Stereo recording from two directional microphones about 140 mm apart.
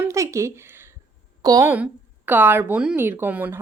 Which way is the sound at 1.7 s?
10° right (ahead or behind).